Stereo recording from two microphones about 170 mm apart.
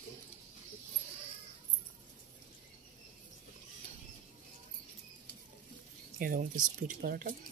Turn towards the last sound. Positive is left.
turn(degrees=-55)  # may be behind; listen again after turning